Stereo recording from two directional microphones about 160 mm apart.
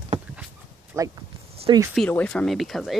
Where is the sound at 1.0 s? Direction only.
20° right (ahead or behind).